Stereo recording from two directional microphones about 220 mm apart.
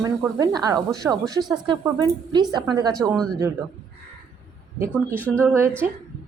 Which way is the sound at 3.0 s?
5° right (ahead or behind).